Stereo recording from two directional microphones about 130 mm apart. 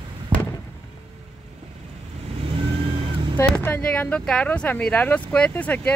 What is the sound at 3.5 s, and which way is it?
Speech, 10° left (ahead or behind).